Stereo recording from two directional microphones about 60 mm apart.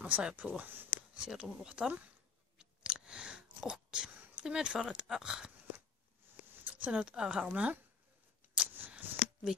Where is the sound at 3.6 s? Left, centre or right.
Centre.